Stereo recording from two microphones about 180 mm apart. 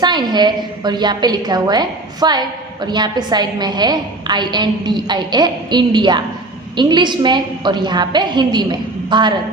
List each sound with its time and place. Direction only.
0.0 s a woman's voice: 25° right (ahead or behind)